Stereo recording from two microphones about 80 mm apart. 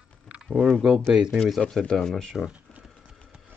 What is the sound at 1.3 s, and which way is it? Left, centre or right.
Speech, centre.